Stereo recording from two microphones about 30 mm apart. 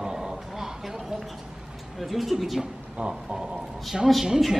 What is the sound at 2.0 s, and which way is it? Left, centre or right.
Speech, centre.